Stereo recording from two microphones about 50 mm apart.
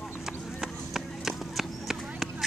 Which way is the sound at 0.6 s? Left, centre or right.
Centre.